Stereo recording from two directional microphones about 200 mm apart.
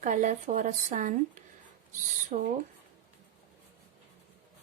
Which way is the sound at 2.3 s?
40° right (ahead or behind).